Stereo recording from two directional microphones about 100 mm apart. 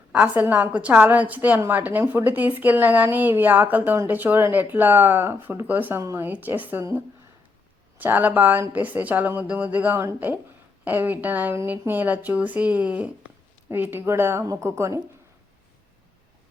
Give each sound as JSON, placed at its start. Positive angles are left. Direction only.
{"t": 0.1, "sound": "a woman's voice", "side_deg": -15}
{"t": 6.0, "sound": "speech", "side_deg": -30}
{"t": 6.2, "sound": "a woman's voice", "side_deg": -20}
{"t": 7.9, "sound": "a woman's voice", "side_deg": -20}